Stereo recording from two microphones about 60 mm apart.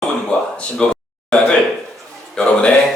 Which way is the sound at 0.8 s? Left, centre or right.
Centre.